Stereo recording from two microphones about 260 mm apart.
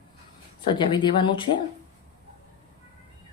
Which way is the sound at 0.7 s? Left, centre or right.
Centre.